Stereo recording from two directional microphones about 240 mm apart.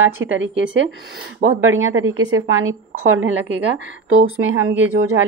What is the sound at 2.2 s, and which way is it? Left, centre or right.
Speech, centre.